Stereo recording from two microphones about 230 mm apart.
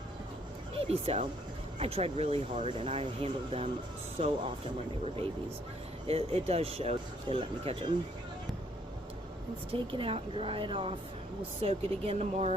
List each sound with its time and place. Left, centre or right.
0.9 s speech: right
6.1 s speech: right
9.7 s speech: right